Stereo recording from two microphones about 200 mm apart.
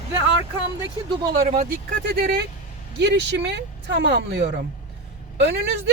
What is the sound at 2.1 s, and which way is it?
Speech, 55° right (ahead or behind).